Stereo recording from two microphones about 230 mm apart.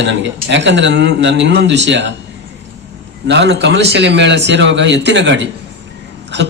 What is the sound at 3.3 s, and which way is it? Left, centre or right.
A man's voice, right.